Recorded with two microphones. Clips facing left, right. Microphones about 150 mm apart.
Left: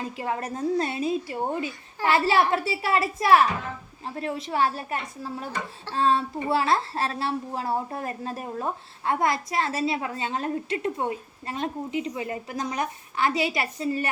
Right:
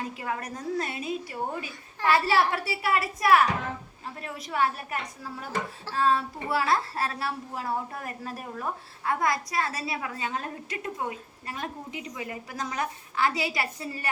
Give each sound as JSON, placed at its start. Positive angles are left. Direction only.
{"t": 0.2, "sound": "a woman's voice", "side_deg": 25}